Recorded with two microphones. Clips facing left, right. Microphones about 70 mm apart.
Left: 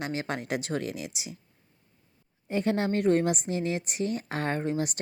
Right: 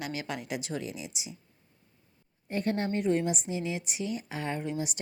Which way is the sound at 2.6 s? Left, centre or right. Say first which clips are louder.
Left 4 dB; left.